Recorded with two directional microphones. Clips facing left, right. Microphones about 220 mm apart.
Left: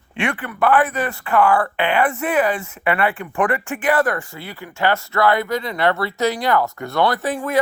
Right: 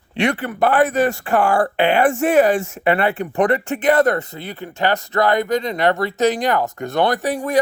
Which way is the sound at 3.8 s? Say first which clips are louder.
Right 3 dB; 20° right (ahead or behind).